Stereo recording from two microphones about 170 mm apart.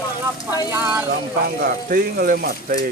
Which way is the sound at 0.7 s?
10° right (ahead or behind).